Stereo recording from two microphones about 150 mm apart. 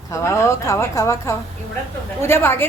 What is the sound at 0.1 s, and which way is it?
A woman's voice, 20° left (ahead or behind).